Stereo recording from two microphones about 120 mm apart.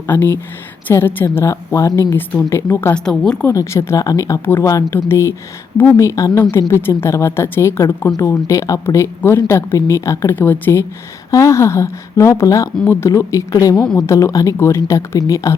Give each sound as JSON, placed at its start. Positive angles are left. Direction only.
{"t": 0.1, "sound": "a woman's voice", "side_deg": 15}
{"t": 2.9, "sound": "a woman's voice", "side_deg": 5}
{"t": 3.4, "sound": "speech", "side_deg": 25}